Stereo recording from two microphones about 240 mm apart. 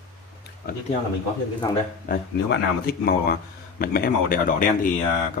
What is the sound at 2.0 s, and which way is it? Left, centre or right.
Speech, left.